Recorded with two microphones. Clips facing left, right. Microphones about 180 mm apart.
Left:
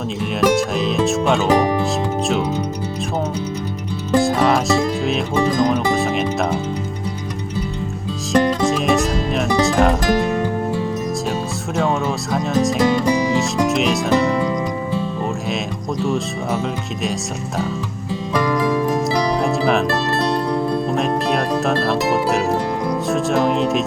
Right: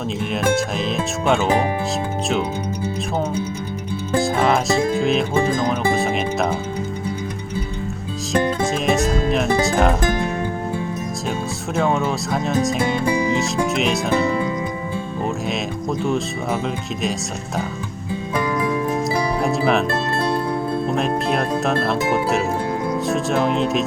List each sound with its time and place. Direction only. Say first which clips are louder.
0.2 s speech: left 4 dB; centre (ahead or behind)
4.2 s speech: left 1 dB; centre (ahead or behind)
9.0 s speech: even; centre (ahead or behind)
11.8 s speech: even; centre (ahead or behind)
12.8 s music: left 3 dB; 40° left (ahead or behind)
13.4 s speech: left 2 dB; centre (ahead or behind)
16.0 s speech: left 2 dB; centre (ahead or behind)
19.4 s music: left 1 dB; centre (ahead or behind)
20.9 s speech: left 2 dB; centre (ahead or behind)
23.0 s speech: left 2 dB; centre (ahead or behind)